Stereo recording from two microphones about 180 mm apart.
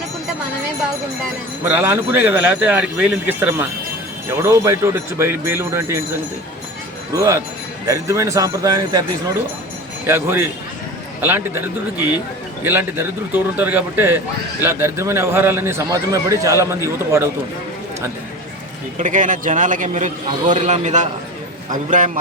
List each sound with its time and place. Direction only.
1.6 s a man's voice: 15° right (ahead or behind)
7.1 s a man's voice: 15° right (ahead or behind)
10.1 s a man's voice: 10° right (ahead or behind)
12.6 s a man's voice: 10° right (ahead or behind)
18.9 s a man's voice: 45° right (ahead or behind)